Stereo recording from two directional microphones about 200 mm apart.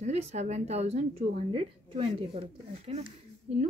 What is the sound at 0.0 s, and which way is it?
Speech, 35° right (ahead or behind).